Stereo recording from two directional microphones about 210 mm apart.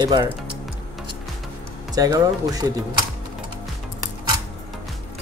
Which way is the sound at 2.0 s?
15° right (ahead or behind).